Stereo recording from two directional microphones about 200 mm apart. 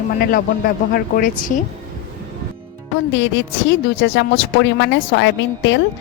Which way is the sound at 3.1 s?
65° left (ahead or behind).